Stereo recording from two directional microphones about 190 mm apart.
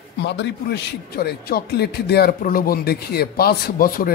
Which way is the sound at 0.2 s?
65° left (ahead or behind).